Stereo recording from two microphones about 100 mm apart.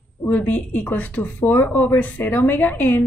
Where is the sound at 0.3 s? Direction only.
15° left (ahead or behind).